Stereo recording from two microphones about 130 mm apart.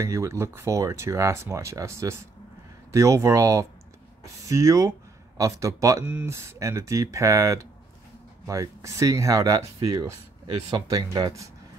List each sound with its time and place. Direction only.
0.0 s speech: 20° right (ahead or behind)